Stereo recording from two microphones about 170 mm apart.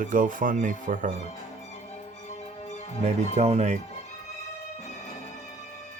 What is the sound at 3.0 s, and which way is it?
Speech, 40° right (ahead or behind).